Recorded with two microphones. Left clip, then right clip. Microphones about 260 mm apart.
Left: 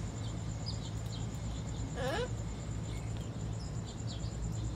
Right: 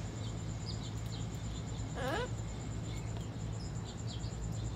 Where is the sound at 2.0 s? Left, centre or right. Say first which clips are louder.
Left 1 dB; centre.